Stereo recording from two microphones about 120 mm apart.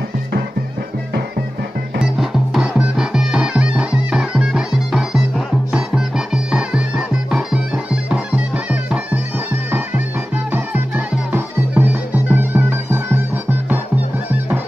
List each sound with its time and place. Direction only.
2.1 s music: centre (ahead or behind)